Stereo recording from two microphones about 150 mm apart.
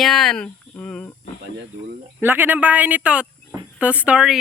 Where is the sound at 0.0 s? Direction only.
5° left (ahead or behind).